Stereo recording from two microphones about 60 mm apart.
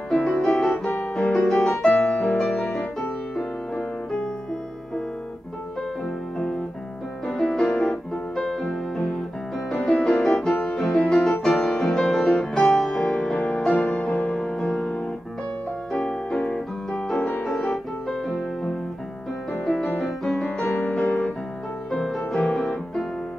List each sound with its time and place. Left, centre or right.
0.1 s music: centre
7.2 s music: centre
13.1 s music: centre
14.1 s music: left
14.4 s music: centre
21.0 s music: left
21.9 s music: centre